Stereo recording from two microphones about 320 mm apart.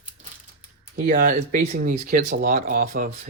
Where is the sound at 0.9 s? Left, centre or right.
Right.